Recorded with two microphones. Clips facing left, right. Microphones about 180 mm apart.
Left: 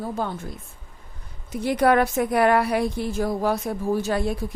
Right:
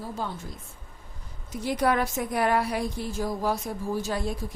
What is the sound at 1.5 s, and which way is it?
A woman's voice, 65° left (ahead or behind).